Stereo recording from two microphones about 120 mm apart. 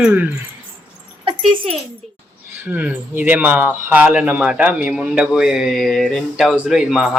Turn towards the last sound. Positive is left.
turn(degrees=-5)  # may be behind; listen again after turning